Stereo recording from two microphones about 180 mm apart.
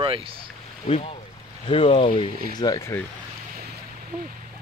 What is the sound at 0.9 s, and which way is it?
Speech, 35° left (ahead or behind).